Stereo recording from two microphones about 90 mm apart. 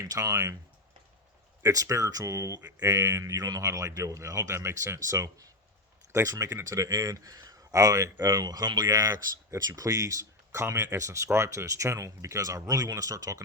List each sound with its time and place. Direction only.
0.0 s a man's voice: 40° right (ahead or behind)
1.6 s a man's voice: 35° right (ahead or behind)